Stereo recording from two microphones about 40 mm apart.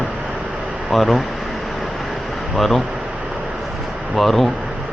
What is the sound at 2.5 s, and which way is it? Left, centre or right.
Speech, centre.